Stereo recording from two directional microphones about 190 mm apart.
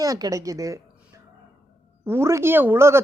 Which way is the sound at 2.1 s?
15° right (ahead or behind).